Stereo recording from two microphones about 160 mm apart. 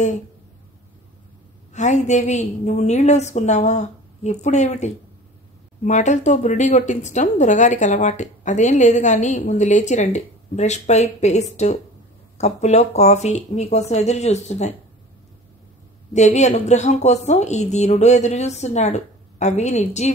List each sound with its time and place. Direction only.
1.7 s a woman's voice: 50° left (ahead or behind)
16.1 s a woman's voice: 45° left (ahead or behind)